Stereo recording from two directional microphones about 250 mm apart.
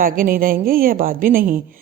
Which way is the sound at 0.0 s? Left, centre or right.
Right.